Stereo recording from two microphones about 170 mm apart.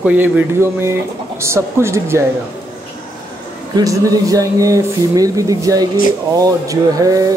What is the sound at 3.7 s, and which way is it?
Speech, 20° right (ahead or behind).